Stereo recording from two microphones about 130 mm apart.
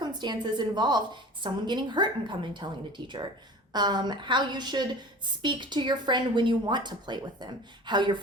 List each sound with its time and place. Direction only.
0.0 s a woman's voice: 35° right (ahead or behind)